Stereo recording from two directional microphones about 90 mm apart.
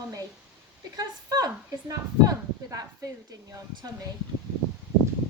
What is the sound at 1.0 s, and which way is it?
Speech, 45° right (ahead or behind).